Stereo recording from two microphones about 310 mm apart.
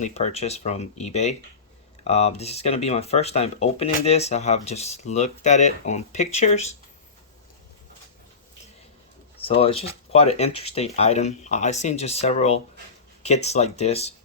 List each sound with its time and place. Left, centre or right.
0.0 s speech: left
9.5 s speech: centre